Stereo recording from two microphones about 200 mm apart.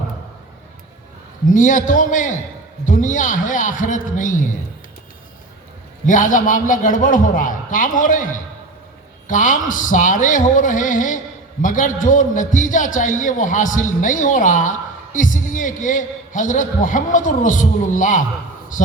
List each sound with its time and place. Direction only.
1.5 s a man's voice: 40° left (ahead or behind)
6.1 s a man's voice: 40° left (ahead or behind)